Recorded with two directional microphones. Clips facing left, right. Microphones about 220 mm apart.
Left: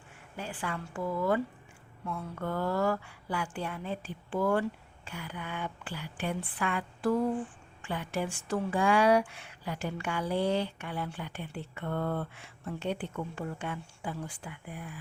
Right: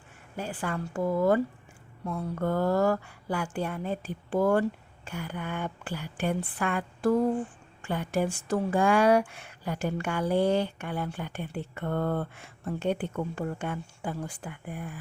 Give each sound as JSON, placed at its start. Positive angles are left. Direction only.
{"t": 0.3, "sound": "speech", "side_deg": -45}